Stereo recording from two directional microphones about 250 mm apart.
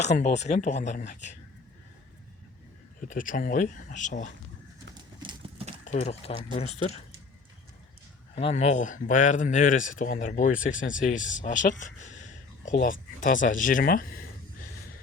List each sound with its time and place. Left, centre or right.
0.0 s speech: left
3.0 s speech: left
5.2 s horse: right
5.8 s speech: left
8.4 s speech: left